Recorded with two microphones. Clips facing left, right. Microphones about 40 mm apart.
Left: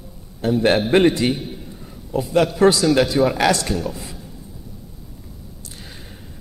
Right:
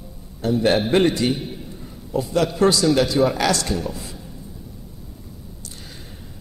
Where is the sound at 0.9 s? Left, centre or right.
Centre.